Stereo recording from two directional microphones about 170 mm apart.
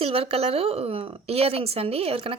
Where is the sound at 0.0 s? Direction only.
35° right (ahead or behind).